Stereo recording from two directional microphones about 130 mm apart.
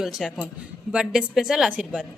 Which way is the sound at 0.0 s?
5° right (ahead or behind).